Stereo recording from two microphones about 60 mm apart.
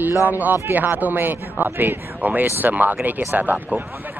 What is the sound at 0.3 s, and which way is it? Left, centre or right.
Speech, right.